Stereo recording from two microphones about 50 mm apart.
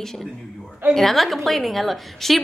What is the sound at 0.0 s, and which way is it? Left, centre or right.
A woman's voice, centre.